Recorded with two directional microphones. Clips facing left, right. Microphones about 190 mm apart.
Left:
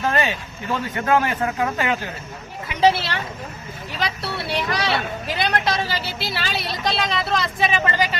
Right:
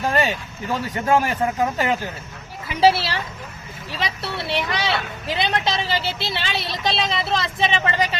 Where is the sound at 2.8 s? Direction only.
30° right (ahead or behind).